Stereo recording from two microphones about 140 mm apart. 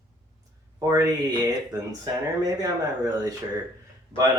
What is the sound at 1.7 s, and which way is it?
Speech, 25° right (ahead or behind).